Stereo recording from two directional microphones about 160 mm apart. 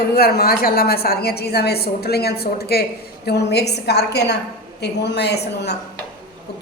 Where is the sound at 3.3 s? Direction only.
90° left.